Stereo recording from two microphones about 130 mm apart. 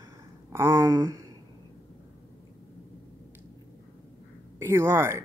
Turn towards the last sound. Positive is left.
turn(degrees=-20)  # may be behind; listen again after turning